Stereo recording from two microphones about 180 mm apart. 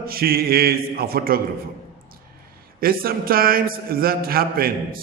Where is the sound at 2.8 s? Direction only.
55° right (ahead or behind).